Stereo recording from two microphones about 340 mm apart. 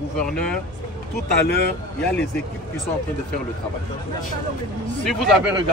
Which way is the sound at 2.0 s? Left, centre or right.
Centre.